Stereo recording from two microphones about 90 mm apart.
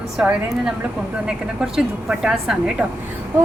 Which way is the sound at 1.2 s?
5° right (ahead or behind).